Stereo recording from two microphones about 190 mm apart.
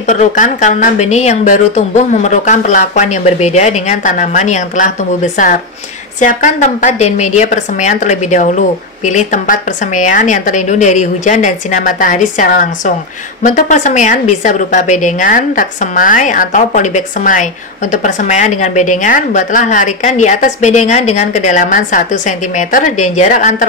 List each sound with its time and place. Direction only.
0.0 s a woman's voice: 40° left (ahead or behind)